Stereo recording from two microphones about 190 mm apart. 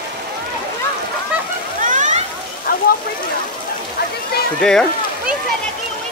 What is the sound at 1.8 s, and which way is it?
Water, 40° right (ahead or behind).